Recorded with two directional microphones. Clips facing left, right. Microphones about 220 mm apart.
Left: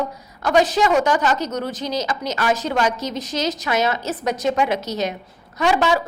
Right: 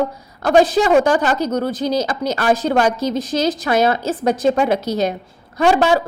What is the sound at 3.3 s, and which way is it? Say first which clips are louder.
A woman's voice: right 4 dB; 30° right (ahead or behind).